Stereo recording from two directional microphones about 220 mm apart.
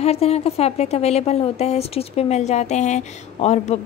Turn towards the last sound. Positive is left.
turn(degrees=30)  # may be behind; listen again after turning